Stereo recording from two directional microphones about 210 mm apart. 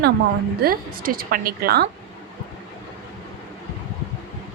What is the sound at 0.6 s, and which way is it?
A woman's voice, 45° right (ahead or behind).